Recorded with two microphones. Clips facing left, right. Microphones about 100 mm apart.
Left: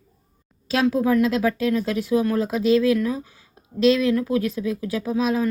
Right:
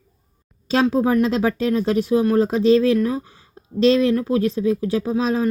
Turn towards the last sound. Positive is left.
turn(degrees=-30)  # may be behind; listen again after turning